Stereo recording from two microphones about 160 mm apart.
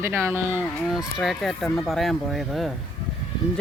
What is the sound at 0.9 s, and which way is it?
Speech, centre (ahead or behind).